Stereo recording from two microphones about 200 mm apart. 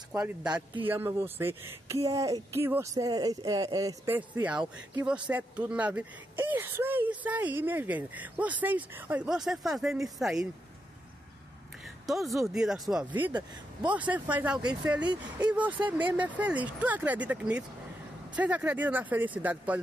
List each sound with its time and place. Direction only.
0.1 s speech: 5° right (ahead or behind)
12.1 s speech: centre (ahead or behind)
14.6 s speech: 20° right (ahead or behind)
15.3 s speech: 5° right (ahead or behind)